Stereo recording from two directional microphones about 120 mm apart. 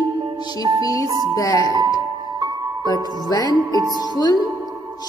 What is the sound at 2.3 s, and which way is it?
Music, 30° right (ahead or behind).